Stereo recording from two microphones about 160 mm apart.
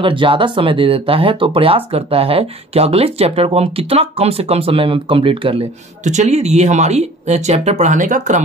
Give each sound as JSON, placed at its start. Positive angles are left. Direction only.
{"t": 0.0, "sound": "speech", "side_deg": -30}
{"t": 6.0, "sound": "speech", "side_deg": -45}